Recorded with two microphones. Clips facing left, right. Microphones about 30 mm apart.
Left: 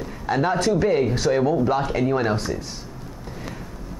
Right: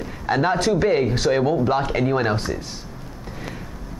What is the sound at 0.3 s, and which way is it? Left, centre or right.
Speech, centre.